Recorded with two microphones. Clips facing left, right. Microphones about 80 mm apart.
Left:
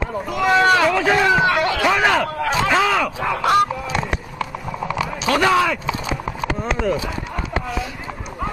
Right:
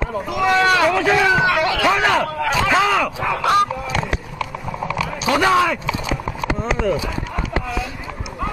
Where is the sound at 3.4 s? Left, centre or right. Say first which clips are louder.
Even; left.